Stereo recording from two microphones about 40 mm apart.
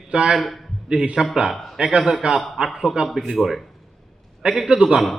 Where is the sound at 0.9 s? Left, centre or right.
Centre.